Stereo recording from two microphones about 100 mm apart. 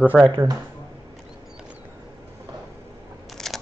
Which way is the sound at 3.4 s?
5° left (ahead or behind).